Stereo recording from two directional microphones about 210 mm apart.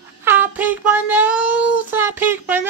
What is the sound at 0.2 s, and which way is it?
Child singing, 10° right (ahead or behind).